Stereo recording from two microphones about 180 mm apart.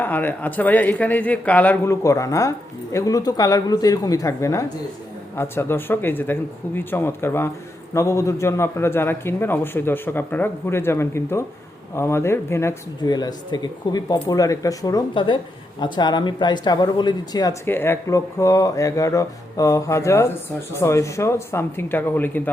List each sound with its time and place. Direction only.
0.0 s speech: 10° left (ahead or behind)